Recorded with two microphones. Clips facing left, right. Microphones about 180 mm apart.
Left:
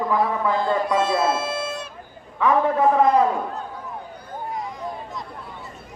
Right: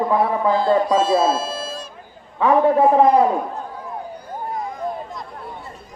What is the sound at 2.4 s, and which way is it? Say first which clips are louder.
Speech: right 4 dB; 30° right (ahead or behind).